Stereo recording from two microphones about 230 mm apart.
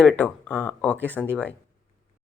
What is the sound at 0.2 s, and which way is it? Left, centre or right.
Speech, centre.